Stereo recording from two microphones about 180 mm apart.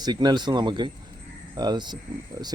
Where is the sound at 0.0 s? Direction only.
25° right (ahead or behind).